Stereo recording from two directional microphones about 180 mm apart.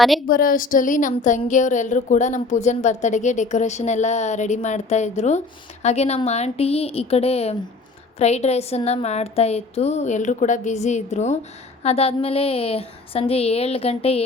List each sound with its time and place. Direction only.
0.3 s a woman's voice: 50° left (ahead or behind); by 14.2 s 35° left (ahead or behind)